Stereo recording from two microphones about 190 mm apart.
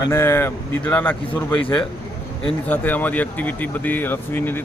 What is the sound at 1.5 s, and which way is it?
Speech, 25° left (ahead or behind).